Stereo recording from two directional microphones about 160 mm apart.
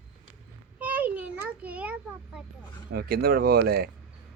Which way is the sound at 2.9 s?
75° right (ahead or behind).